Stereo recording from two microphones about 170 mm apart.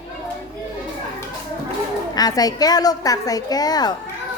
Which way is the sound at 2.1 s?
20° left (ahead or behind).